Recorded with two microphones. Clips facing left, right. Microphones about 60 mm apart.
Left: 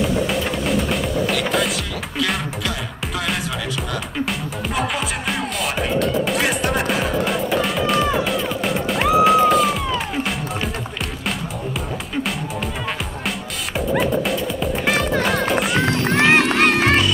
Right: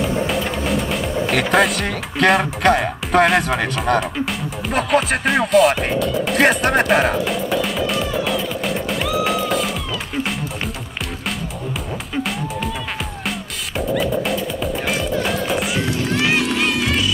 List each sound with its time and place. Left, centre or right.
0.3 s music: centre
1.3 s speech: right
5.5 s speech: centre
6.3 s speech: right
7.2 s music: centre
14.9 s music: left